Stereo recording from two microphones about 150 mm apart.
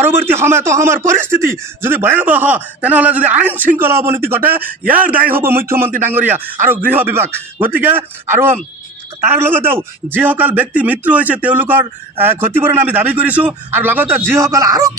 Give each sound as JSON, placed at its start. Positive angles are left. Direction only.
{"t": 0.0, "sound": "speech", "side_deg": -15}